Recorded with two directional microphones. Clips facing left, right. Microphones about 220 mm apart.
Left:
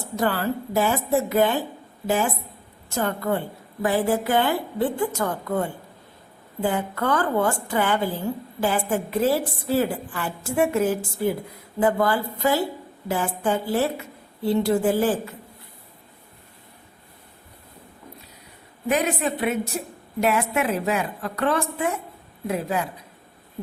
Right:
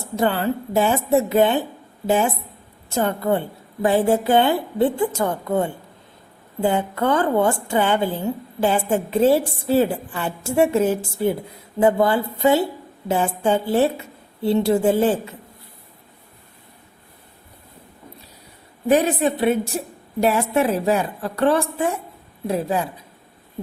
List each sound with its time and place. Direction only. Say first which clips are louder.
0.2 s a woman's voice: right 3 dB; 25° right (ahead or behind)
18.9 s a woman's voice: right 6 dB; 30° right (ahead or behind)